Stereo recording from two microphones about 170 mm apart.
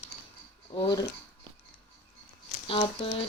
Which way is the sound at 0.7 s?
30° left (ahead or behind).